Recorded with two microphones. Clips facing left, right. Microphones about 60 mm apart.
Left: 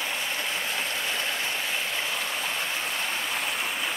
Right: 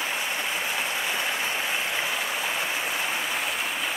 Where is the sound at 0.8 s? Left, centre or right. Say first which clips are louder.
Right 2 dB; centre.